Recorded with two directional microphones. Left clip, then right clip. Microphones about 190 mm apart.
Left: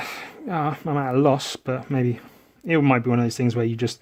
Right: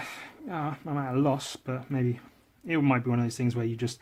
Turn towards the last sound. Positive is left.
turn(degrees=35)  # may be behind; listen again after turning